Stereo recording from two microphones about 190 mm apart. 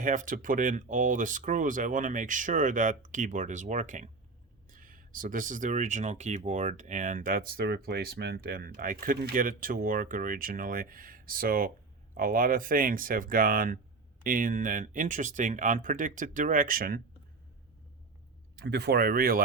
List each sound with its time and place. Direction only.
0.0 s speech: 45° right (ahead or behind)
18.6 s speech: 60° right (ahead or behind)